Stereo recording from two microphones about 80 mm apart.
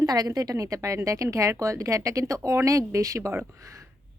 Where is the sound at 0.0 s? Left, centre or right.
Right.